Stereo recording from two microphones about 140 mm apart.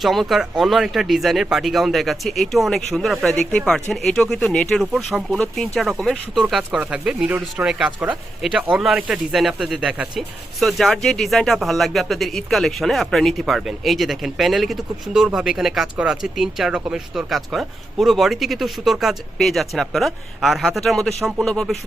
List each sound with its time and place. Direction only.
0.0 s speech: centre (ahead or behind)